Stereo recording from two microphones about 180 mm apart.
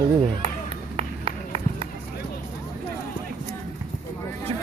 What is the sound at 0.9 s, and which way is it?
Run, 30° right (ahead or behind).